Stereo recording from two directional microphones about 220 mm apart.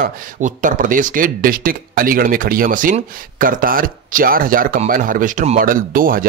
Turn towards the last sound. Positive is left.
turn(degrees=-40)  # may be behind; listen again after turning